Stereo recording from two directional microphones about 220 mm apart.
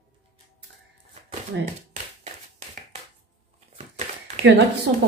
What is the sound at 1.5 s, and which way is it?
Speech, 55° right (ahead or behind).